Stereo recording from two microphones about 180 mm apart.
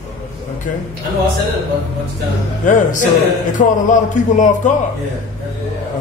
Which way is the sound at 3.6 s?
45° left (ahead or behind).